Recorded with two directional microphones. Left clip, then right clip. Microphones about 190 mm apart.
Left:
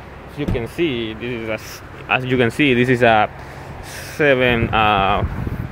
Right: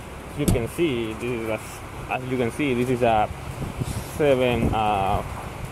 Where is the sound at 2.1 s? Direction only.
25° left (ahead or behind); by 4.6 s 10° left (ahead or behind).